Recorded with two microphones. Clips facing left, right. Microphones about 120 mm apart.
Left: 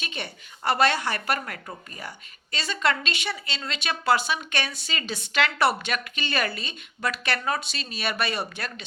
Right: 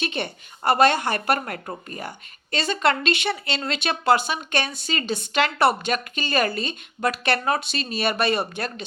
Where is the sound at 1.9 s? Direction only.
50° right (ahead or behind).